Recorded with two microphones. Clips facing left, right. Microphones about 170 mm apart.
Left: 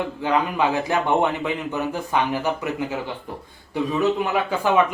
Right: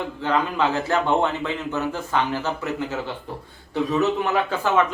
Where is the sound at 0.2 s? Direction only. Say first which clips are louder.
Even; 15° left (ahead or behind).